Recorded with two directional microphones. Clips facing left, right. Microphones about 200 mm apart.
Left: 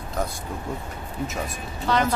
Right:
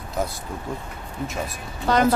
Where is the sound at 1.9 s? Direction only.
45° right (ahead or behind).